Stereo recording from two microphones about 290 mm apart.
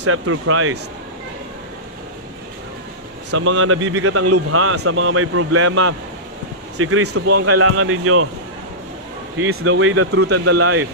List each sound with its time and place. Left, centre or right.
0.0 s a man's voice: right
3.3 s a man's voice: right
9.4 s a man's voice: right